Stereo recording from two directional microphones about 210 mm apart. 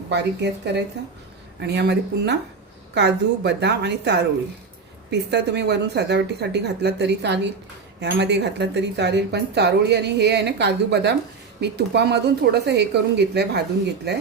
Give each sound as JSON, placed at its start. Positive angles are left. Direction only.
{"t": 0.1, "sound": "speech", "side_deg": -55}
{"t": 5.3, "sound": "speech", "side_deg": -55}